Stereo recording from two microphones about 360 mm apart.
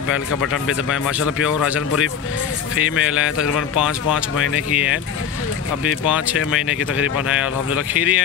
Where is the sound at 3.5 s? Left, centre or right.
Centre.